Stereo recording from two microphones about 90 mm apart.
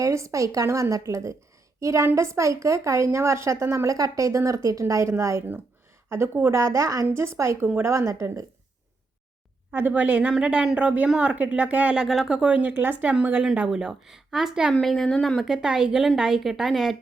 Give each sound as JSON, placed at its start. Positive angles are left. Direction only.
{"t": 0.0, "sound": "speech", "side_deg": -35}
{"t": 9.7, "sound": "speech", "side_deg": -20}
{"t": 12.0, "sound": "speech", "side_deg": -5}
{"t": 13.4, "sound": "a woman's voice", "side_deg": -5}
{"t": 15.4, "sound": "a woman's voice", "side_deg": -5}